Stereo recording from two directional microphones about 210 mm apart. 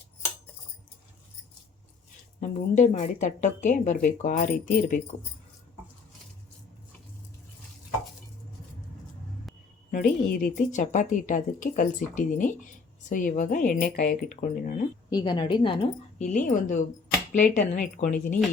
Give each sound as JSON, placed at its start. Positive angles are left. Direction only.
{"t": 2.4, "sound": "speech", "side_deg": 35}
{"t": 9.9, "sound": "speech", "side_deg": 45}
{"t": 15.1, "sound": "a woman's voice", "side_deg": 20}